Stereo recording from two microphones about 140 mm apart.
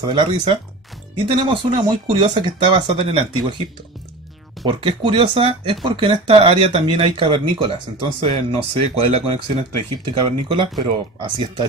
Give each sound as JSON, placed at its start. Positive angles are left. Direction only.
{"t": 0.0, "sound": "speech", "side_deg": -35}
{"t": 4.6, "sound": "speech", "side_deg": -40}